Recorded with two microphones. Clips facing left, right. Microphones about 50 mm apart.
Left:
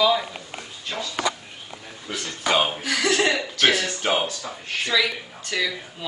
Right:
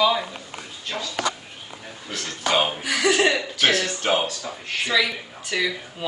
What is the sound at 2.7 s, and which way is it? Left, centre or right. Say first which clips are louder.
Speech: right 2 dB; centre.